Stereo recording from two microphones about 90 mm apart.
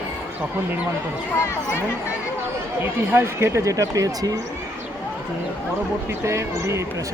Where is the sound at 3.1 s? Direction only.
30° right (ahead or behind).